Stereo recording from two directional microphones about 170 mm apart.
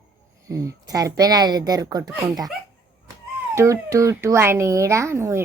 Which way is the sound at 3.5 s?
15° right (ahead or behind).